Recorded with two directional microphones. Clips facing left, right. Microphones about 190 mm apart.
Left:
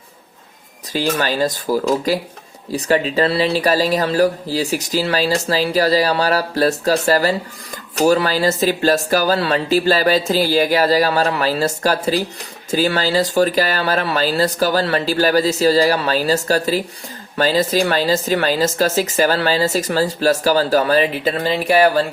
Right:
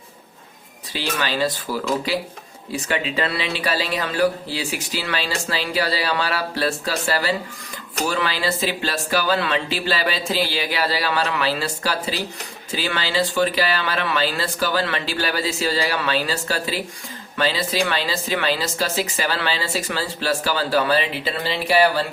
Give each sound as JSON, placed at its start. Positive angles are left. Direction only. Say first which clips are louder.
{"t": 0.9, "sound": "speech", "louder": "left 5 dB", "side_deg": 45}